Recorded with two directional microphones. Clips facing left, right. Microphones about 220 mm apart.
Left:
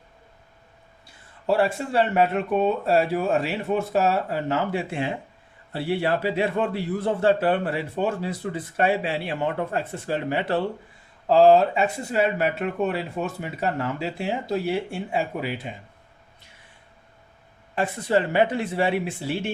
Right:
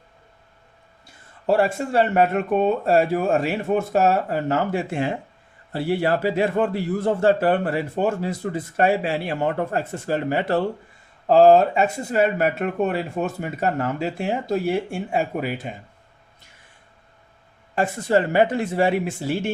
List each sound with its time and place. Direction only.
1.5 s a man's voice: 45° right (ahead or behind)
17.7 s a man's voice: 45° right (ahead or behind)